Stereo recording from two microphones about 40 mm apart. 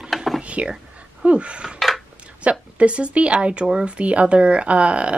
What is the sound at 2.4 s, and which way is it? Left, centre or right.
Speech, right.